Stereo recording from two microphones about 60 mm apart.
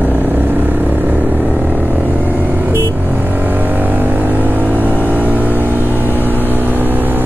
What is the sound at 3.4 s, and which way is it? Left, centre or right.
Vehicle, right.